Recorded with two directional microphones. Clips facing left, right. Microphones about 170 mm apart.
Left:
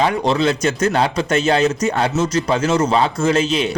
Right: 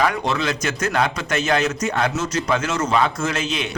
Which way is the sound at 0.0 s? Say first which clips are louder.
Left 5 dB; 30° left (ahead or behind).